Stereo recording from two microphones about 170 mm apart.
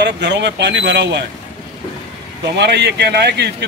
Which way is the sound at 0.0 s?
90° right.